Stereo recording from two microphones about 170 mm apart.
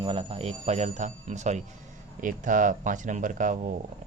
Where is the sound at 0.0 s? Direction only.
30° right (ahead or behind).